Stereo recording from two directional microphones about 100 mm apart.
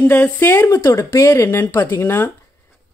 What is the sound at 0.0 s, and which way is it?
Speech, 15° left (ahead or behind).